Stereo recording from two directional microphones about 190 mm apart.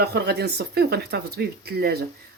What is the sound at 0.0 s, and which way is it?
Speech, 60° right (ahead or behind).